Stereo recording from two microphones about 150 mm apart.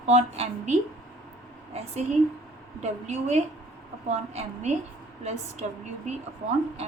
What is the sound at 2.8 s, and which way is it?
A woman's voice, 50° right (ahead or behind).